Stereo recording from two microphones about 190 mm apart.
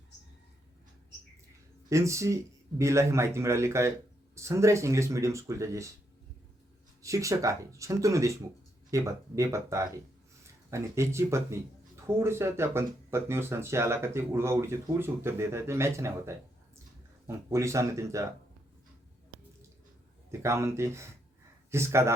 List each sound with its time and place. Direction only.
1.9 s speech: 15° right (ahead or behind)
7.0 s speech: 15° right (ahead or behind)
20.4 s speech: 15° right (ahead or behind)